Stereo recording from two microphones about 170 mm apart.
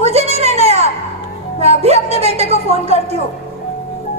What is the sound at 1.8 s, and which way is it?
A woman's voice, 40° right (ahead or behind).